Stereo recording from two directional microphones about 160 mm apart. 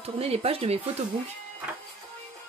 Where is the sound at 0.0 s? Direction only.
40° right (ahead or behind).